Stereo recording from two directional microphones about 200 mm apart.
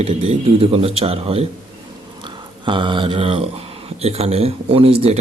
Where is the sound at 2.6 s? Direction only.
25° right (ahead or behind).